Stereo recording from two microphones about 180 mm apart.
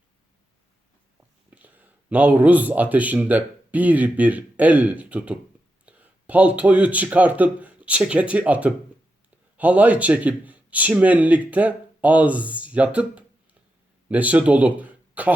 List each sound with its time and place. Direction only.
1.5 s a man's voice: 10° right (ahead or behind)